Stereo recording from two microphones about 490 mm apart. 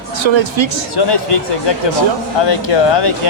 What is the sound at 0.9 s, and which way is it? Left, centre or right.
Speech, left.